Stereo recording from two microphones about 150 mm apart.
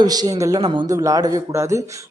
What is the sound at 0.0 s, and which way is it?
A man's voice, 25° right (ahead or behind).